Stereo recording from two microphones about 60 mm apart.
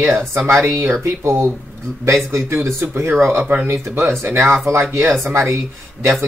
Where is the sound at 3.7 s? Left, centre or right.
Right.